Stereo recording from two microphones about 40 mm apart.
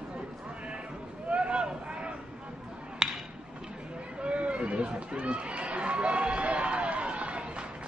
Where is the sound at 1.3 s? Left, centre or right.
Right.